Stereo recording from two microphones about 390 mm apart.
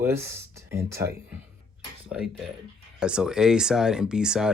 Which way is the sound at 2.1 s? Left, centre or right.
Centre.